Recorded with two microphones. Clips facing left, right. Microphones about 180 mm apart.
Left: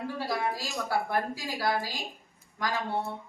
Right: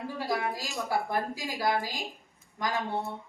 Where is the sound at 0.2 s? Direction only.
20° right (ahead or behind).